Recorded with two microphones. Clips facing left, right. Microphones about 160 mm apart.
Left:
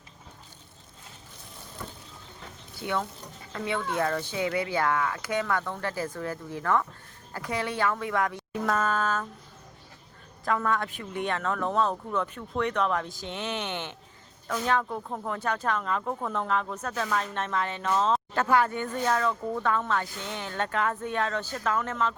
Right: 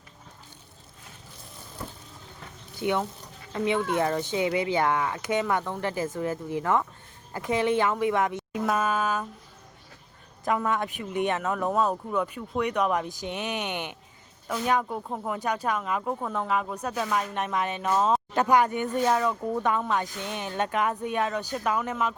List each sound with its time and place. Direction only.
2.8 s speech: 20° right (ahead or behind)
10.4 s speech: 20° right (ahead or behind)